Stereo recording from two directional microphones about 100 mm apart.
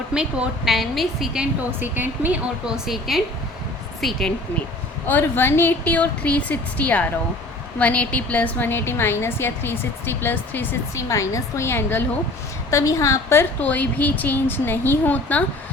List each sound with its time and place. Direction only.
0.1 s a woman's voice: 10° right (ahead or behind)
1.8 s a woman's voice: 15° right (ahead or behind); by 4.2 s 5° left (ahead or behind)
5.0 s a woman's voice: 20° left (ahead or behind)
10.9 s a woman's voice: 30° left (ahead or behind)